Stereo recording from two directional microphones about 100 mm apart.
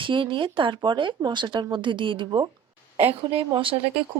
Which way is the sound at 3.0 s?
90° right.